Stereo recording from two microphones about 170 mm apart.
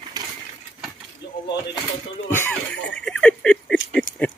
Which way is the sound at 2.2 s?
15° left (ahead or behind).